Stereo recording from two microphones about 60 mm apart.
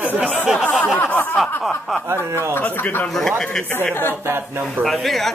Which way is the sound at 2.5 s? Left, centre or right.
Left.